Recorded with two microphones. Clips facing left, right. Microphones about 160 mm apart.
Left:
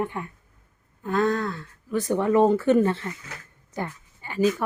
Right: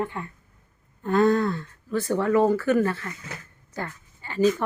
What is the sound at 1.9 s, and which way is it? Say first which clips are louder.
A woman's voice: left 1 dB; 15° left (ahead or behind).